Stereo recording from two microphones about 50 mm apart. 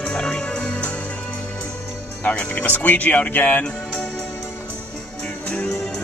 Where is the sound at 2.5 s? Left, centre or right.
Left.